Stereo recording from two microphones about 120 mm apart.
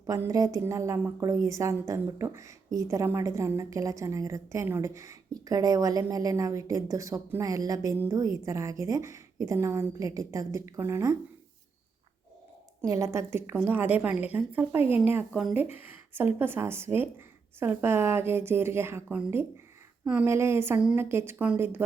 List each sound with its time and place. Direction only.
0.0 s a woman's voice: 25° right (ahead or behind)
12.9 s a woman's voice: 25° right (ahead or behind)
15.3 s speech: 5° right (ahead or behind)
15.7 s a woman's voice: 15° right (ahead or behind)